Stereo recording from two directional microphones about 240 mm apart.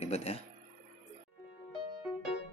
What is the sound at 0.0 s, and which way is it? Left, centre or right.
Speech, left.